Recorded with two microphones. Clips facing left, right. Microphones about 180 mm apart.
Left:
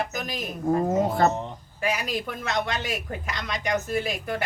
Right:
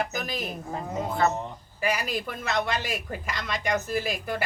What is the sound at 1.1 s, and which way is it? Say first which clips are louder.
Speech: left 3 dB; 40° left (ahead or behind).